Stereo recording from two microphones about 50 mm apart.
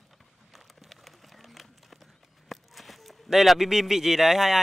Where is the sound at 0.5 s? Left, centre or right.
Centre.